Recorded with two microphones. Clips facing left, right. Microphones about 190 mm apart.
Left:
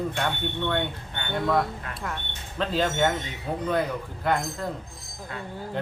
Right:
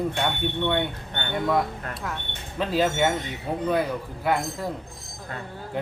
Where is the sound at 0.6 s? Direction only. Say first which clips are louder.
Right 2 dB; 10° right (ahead or behind).